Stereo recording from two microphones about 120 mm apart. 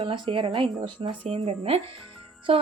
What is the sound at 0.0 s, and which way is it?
A woman's voice, 40° right (ahead or behind).